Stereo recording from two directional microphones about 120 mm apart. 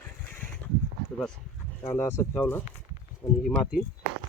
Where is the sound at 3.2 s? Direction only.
35° left (ahead or behind).